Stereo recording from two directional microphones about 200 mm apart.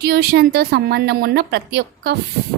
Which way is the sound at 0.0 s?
55° right (ahead or behind).